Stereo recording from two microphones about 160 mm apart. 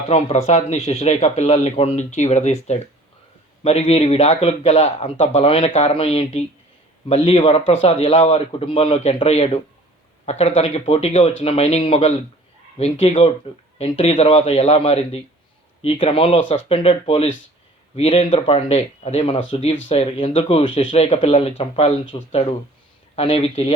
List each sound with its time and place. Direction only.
0.1 s a man's voice: 45° left (ahead or behind)